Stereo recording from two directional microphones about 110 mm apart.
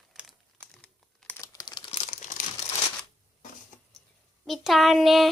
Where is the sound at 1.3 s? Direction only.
30° left (ahead or behind).